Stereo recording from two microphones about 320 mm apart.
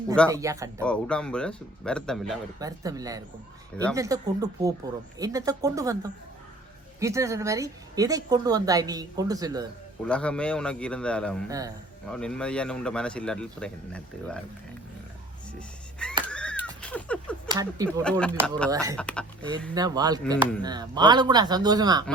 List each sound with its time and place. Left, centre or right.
0.3 s a woman's voice: centre
0.9 s speech: centre
2.6 s a woman's voice: centre
10.0 s speech: centre
11.4 s a woman's voice: centre
12.0 s speech: centre
15.5 s music: centre
16.2 s neigh: centre
17.5 s speech: centre
18.0 s speech: centre
18.3 s a woman's voice: centre
18.9 s speech: centre
19.7 s a woman's voice: centre